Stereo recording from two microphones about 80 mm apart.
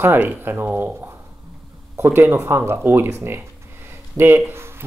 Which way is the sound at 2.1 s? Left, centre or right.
Right.